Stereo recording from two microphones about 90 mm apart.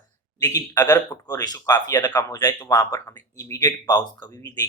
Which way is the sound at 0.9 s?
45° left (ahead or behind).